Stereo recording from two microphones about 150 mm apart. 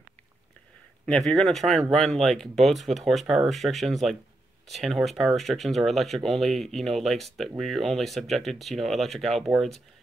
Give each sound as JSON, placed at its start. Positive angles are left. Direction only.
{"t": 1.0, "sound": "speech", "side_deg": 5}